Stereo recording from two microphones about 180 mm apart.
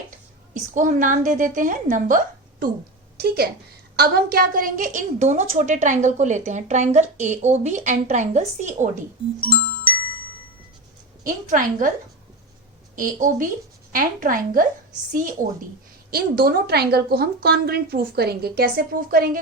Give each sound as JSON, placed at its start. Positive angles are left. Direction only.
{"t": 0.5, "sound": "a woman's voice", "side_deg": -45}
{"t": 3.2, "sound": "a woman's voice", "side_deg": -60}
{"t": 9.9, "sound": "glockenspiel", "side_deg": -30}
{"t": 11.2, "sound": "a woman's voice", "side_deg": -50}
{"t": 13.0, "sound": "a woman's voice", "side_deg": -45}
{"t": 16.0, "sound": "a woman's voice", "side_deg": -55}